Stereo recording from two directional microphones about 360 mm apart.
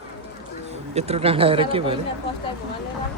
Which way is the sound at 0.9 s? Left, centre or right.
Centre.